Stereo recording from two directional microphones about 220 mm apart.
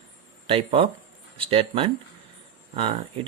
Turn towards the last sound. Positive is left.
turn(degrees=-25)  # may be behind; listen again after turning